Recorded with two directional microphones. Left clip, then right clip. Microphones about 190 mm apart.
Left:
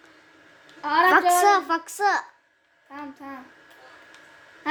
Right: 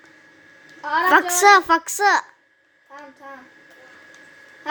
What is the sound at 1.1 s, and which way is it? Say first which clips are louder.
A woman's voice: right 6 dB; 15° right (ahead or behind).